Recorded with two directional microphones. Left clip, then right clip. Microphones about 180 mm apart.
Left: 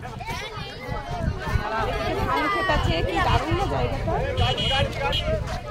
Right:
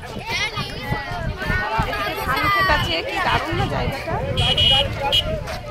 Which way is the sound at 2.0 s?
10° left (ahead or behind).